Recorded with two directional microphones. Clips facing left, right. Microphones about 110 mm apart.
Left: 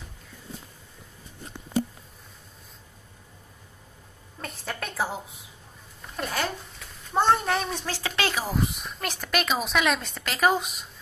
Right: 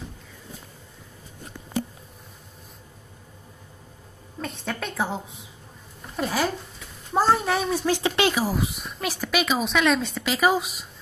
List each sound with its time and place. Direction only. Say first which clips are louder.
4.4 s a sound: right 4 dB; centre (ahead or behind)
6.1 s a child's voice: right 4 dB; 5° right (ahead or behind)
8.0 s speech: right 6 dB; 20° right (ahead or behind)
8.4 s a woman's voice: right 3 dB; 5° right (ahead or behind)